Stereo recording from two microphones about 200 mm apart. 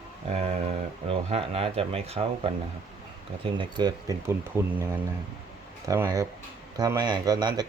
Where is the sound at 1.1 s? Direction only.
30° right (ahead or behind).